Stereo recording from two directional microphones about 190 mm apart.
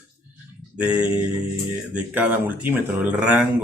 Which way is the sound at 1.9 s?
10° right (ahead or behind).